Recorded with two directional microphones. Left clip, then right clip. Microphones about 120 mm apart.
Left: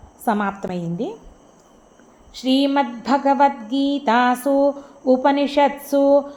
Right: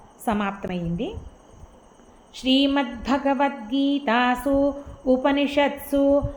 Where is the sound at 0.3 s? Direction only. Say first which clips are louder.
Left 4 dB; 30° left (ahead or behind).